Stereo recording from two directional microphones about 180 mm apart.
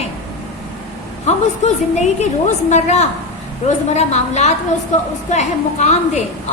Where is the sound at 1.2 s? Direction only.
40° left (ahead or behind).